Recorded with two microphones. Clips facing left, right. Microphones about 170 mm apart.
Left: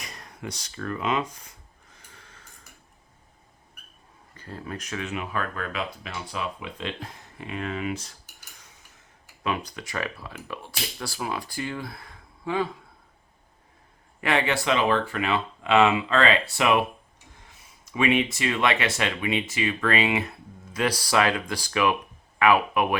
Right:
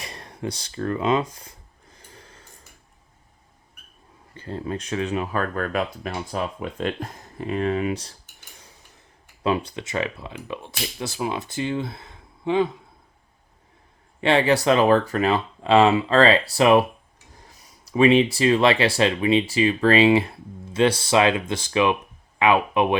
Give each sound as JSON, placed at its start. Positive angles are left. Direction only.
{"t": 0.0, "sound": "speech", "side_deg": -30}
{"t": 2.0, "sound": "snort", "side_deg": -30}
{"t": 4.4, "sound": "speech", "side_deg": -25}
{"t": 9.4, "sound": "speech", "side_deg": -30}
{"t": 14.2, "sound": "speech", "side_deg": -30}